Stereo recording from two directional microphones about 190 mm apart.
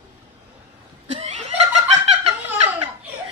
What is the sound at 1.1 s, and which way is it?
Snicker, 35° right (ahead or behind).